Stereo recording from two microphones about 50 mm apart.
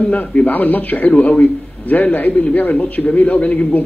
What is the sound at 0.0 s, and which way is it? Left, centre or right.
A man's voice, left.